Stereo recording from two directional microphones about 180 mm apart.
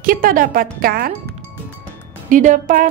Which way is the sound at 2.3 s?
45° right (ahead or behind).